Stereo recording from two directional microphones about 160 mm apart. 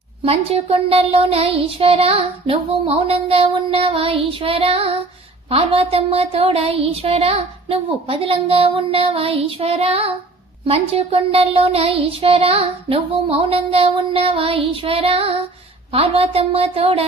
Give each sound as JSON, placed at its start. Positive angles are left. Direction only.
{"t": 0.3, "sound": "speech", "side_deg": -35}